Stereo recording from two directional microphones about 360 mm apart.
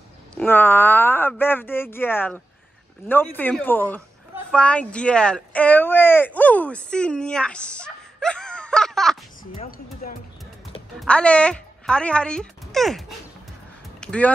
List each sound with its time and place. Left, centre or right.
0.4 s speech: centre
9.4 s speech: left
11.0 s speech: centre
14.0 s speech: centre